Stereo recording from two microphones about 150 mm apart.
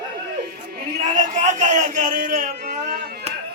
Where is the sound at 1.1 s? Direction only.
55° right (ahead or behind).